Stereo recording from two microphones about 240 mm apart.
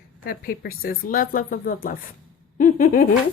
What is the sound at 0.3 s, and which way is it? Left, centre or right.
A woman's voice, left.